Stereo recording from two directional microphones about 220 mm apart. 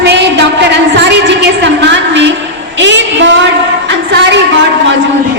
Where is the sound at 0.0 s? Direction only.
50° right (ahead or behind).